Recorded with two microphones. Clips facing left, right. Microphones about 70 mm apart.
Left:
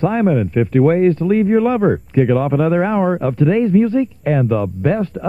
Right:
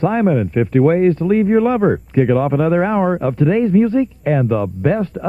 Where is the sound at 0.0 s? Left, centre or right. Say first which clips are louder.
Even; centre.